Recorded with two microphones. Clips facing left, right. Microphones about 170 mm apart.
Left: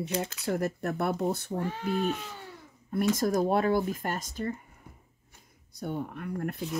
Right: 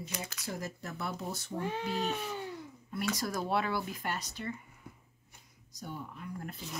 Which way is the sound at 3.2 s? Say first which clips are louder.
Left 6 dB; 45° left (ahead or behind).